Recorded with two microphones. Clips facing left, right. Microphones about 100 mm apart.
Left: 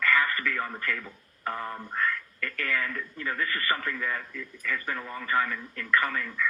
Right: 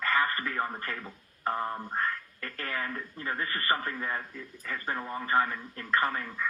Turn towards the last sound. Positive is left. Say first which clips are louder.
# left 1 dB
turn(degrees=-35)  # may be behind; listen again after turning